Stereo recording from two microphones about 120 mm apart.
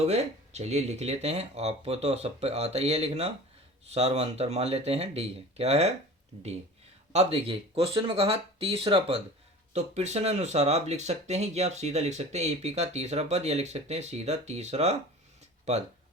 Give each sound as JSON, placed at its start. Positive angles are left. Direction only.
{"t": 0.0, "sound": "speech", "side_deg": -65}
{"t": 7.1, "sound": "speech", "side_deg": -60}
{"t": 9.7, "sound": "speech", "side_deg": -70}